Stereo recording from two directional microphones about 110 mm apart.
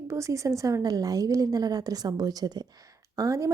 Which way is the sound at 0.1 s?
25° right (ahead or behind).